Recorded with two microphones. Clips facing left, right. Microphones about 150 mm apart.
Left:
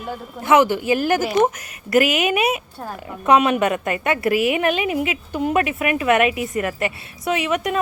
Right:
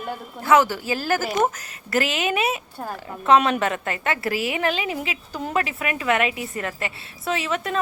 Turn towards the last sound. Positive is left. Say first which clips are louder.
# left 4 dB
turn(degrees=15)  # may be behind; listen again after turning